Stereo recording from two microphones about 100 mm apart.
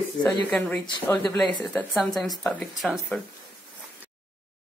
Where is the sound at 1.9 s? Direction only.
5° left (ahead or behind).